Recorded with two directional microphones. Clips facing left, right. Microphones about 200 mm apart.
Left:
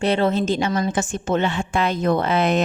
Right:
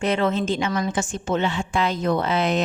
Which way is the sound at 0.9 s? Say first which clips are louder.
Left 2 dB; 55° left (ahead or behind).